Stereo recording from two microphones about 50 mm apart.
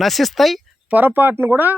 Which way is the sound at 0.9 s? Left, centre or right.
Right.